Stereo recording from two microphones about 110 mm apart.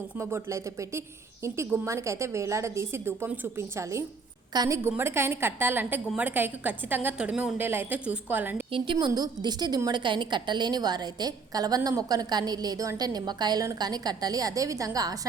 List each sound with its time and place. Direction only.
0.2 s a woman's voice: 25° right (ahead or behind)
4.5 s a woman's voice: 35° right (ahead or behind)
4.8 s a woman's voice: 20° right (ahead or behind)
8.7 s a woman's voice: 50° right (ahead or behind); by 15.3 s 35° right (ahead or behind)